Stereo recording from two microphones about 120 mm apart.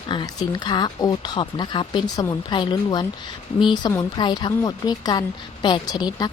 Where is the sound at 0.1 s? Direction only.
40° left (ahead or behind).